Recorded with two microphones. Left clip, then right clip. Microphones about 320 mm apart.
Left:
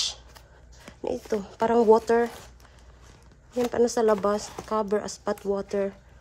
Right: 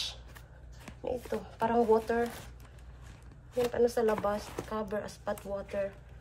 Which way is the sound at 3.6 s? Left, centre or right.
Left.